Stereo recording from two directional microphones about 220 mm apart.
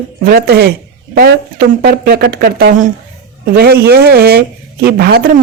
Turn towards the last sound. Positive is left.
turn(degrees=-45)  # may be behind; listen again after turning